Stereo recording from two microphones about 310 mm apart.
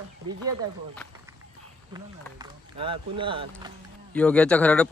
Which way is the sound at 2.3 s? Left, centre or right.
Centre.